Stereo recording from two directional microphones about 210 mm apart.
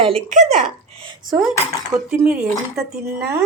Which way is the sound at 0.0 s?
30° right (ahead or behind).